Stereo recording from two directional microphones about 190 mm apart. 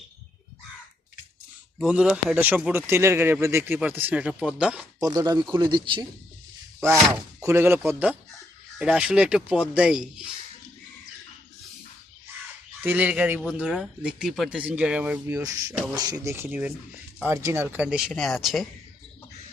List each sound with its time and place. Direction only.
1.8 s speech: 5° right (ahead or behind)
4.9 s speech: 20° right (ahead or behind)
6.7 s speech: 5° right (ahead or behind)
12.8 s speech: 10° right (ahead or behind)